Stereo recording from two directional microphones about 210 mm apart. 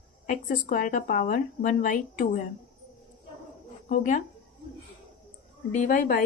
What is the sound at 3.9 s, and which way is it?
Speech, 40° left (ahead or behind).